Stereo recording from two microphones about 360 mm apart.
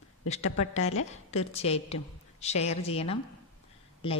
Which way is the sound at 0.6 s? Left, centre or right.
Centre.